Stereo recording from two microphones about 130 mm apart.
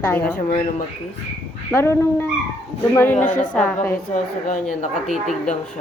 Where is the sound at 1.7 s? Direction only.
20° left (ahead or behind).